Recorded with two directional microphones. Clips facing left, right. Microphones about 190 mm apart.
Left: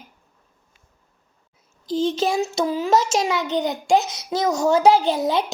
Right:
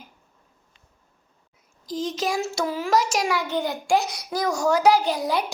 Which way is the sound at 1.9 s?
30° left (ahead or behind).